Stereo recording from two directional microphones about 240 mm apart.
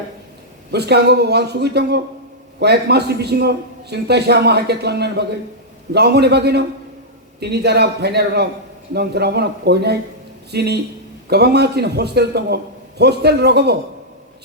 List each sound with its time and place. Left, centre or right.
0.7 s a man's voice: right